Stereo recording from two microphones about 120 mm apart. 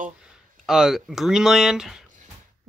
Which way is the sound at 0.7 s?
5° right (ahead or behind).